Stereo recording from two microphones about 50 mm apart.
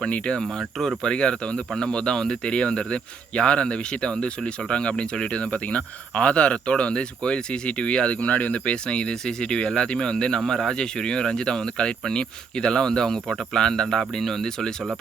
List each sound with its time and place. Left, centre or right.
0.0 s speech: centre